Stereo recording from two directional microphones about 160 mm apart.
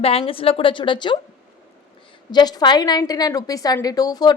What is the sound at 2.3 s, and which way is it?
A woman's voice, 25° left (ahead or behind).